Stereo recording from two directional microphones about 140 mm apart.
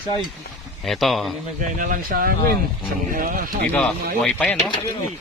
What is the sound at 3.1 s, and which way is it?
Speech, 80° right.